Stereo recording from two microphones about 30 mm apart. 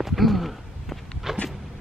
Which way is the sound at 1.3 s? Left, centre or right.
Centre.